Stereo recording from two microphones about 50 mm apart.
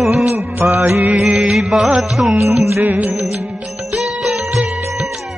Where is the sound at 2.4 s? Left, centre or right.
Right.